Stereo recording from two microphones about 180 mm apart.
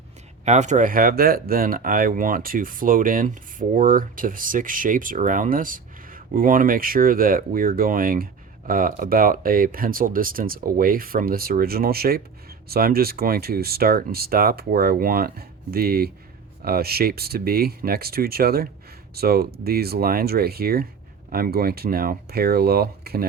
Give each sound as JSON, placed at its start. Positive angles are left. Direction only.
{"t": 0.4, "sound": "speech", "side_deg": -40}